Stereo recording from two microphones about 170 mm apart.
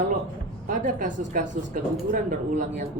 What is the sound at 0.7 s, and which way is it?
Speech, 50° right (ahead or behind).